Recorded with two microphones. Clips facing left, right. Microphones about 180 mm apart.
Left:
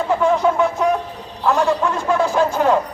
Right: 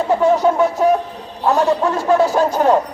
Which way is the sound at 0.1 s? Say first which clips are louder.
Right 3 dB; 40° right (ahead or behind).